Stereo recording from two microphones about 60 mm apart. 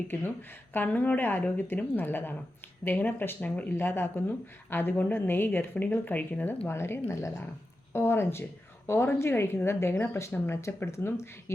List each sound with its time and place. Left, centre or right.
0.7 s a woman's voice: left
3.8 s a woman's voice: left
6.7 s speech: left
7.9 s a woman's voice: left